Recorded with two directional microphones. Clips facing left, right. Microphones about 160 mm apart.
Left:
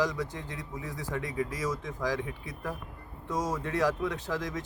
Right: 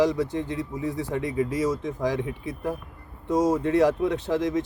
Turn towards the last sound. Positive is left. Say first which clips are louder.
# right 9 dB
turn(degrees=-25)  # may be behind; listen again after turning